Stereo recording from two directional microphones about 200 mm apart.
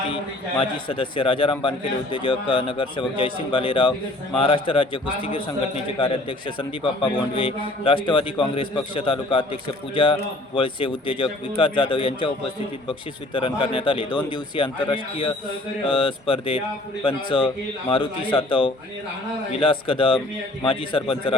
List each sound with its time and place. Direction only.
0.6 s a man's voice: 25° left (ahead or behind)